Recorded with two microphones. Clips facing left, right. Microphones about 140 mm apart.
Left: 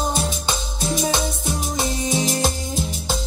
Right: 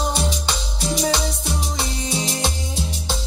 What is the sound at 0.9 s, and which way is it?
Music, 20° left (ahead or behind).